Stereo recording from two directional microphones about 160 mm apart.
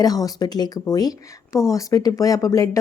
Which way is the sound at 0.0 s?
25° left (ahead or behind).